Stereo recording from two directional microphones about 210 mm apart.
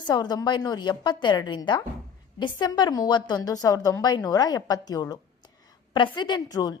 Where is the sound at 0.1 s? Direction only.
20° left (ahead or behind).